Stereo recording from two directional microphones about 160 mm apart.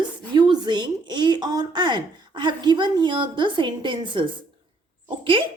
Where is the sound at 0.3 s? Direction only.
25° right (ahead or behind).